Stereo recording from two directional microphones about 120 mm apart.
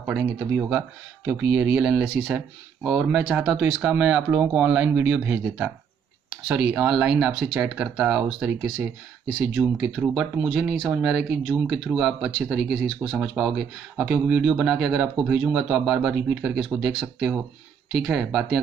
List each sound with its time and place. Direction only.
0.0 s speech: 10° right (ahead or behind)
2.8 s speech: 5° right (ahead or behind)